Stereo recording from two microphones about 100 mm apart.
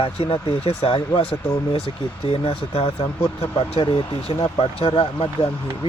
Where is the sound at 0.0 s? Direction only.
75° left (ahead or behind).